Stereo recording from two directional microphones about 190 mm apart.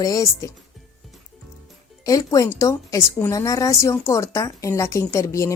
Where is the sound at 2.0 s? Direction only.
20° left (ahead or behind).